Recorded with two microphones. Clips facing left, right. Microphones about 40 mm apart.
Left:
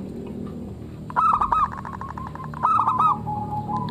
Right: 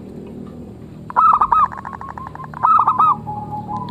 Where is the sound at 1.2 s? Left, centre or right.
Right.